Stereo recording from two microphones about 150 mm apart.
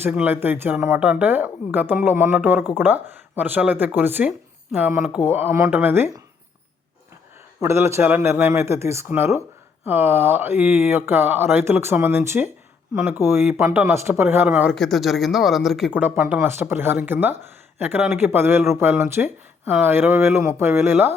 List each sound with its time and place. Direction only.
0.0 s speech: 10° right (ahead or behind)
7.6 s speech: 20° right (ahead or behind)
14.8 s speech: centre (ahead or behind); by 21.1 s 15° right (ahead or behind)